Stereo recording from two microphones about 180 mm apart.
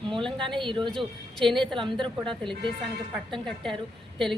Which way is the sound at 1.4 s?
Centre (ahead or behind).